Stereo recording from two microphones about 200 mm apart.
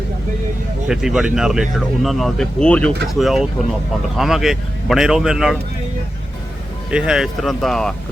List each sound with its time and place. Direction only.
0.9 s speech: 5° right (ahead or behind)
6.9 s speech: 5° right (ahead or behind)